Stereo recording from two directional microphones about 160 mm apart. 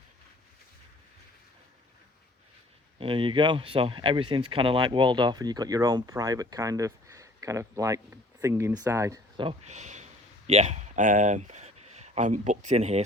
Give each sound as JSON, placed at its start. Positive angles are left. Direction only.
{"t": 3.0, "sound": "speech", "side_deg": -35}
{"t": 9.4, "sound": "speech", "side_deg": -40}